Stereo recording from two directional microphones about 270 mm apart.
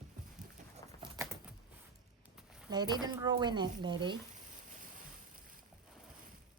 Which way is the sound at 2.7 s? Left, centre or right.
Centre.